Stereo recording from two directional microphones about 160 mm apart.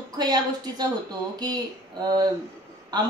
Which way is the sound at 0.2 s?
25° right (ahead or behind).